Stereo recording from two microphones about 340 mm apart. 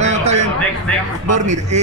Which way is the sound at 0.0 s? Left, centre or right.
Centre.